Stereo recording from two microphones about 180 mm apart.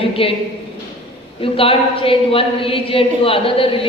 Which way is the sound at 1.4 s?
30° left (ahead or behind).